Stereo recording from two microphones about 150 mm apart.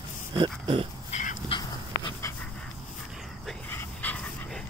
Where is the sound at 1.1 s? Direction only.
55° left (ahead or behind).